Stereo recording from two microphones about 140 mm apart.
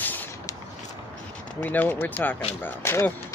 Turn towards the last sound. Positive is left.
turn(degrees=15)  # may be behind; listen again after turning